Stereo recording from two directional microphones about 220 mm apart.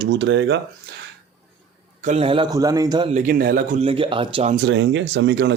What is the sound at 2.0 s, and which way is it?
A man's voice, 30° right (ahead or behind).